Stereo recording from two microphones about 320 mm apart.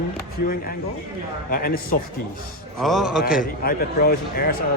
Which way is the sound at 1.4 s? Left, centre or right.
Left.